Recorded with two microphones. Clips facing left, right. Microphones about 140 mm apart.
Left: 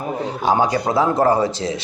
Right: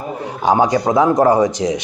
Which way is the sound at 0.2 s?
10° right (ahead or behind).